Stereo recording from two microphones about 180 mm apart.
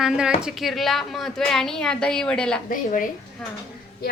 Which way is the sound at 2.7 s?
50° left (ahead or behind).